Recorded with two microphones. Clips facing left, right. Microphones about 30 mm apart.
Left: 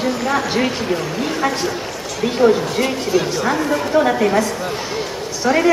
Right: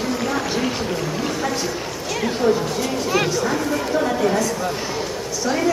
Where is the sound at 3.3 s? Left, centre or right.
Left.